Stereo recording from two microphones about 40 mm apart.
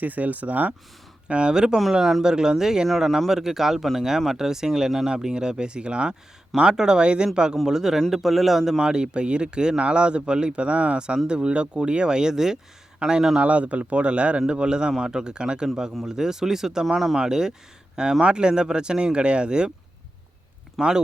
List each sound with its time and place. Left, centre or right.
0.0 s speech: right
1.3 s a man's voice: right
7.5 s a man's voice: centre
8.8 s a man's voice: centre
13.3 s a man's voice: right
20.8 s speech: centre